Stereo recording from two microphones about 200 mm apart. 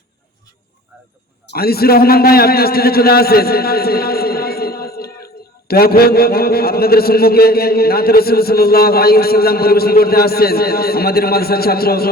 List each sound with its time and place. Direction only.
1.5 s a man's voice: 50° left (ahead or behind)